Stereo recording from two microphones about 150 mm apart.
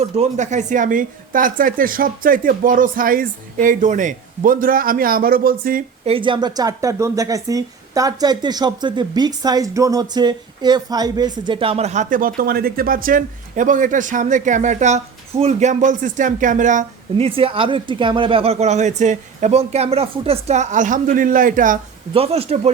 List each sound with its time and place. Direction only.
0.0 s a woman's voice: 50° right (ahead or behind); by 5.8 s 75° right (ahead or behind)
6.1 s speech: 35° right (ahead or behind); by 16.8 s 55° right (ahead or behind)
17.2 s speech: 40° right (ahead or behind); by 21.8 s 65° right (ahead or behind)
22.1 s speech: 40° right (ahead or behind)